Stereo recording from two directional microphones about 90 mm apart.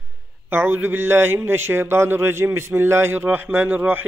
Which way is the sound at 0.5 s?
25° right (ahead or behind).